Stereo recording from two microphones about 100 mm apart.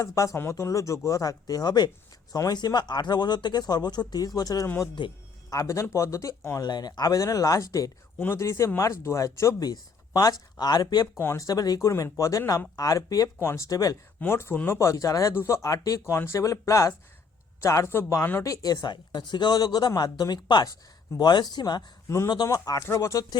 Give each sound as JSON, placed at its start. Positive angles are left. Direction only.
{"t": 0.0, "sound": "speech", "side_deg": 30}
{"t": 6.7, "sound": "speech", "side_deg": 45}
{"t": 11.2, "sound": "speech", "side_deg": 30}
{"t": 14.2, "sound": "speech", "side_deg": 25}
{"t": 14.8, "sound": "speech", "side_deg": 35}
{"t": 18.4, "sound": "speech", "side_deg": 35}